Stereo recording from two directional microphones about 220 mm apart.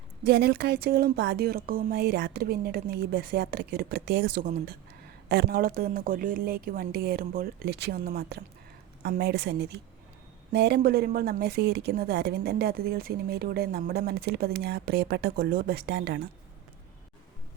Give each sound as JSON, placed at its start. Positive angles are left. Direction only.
{"t": 0.3, "sound": "a woman's voice", "side_deg": -45}